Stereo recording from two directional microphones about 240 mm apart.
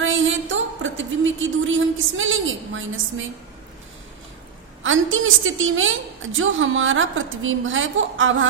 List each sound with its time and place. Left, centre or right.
0.0 s a woman's voice: right
4.8 s a woman's voice: right